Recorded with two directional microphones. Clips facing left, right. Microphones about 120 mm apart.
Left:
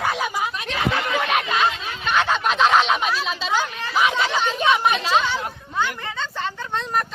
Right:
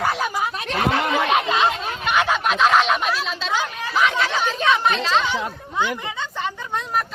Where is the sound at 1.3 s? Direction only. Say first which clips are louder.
Right 3 dB; 25° right (ahead or behind).